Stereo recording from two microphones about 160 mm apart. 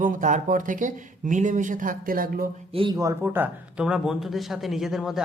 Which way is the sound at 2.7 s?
30° right (ahead or behind).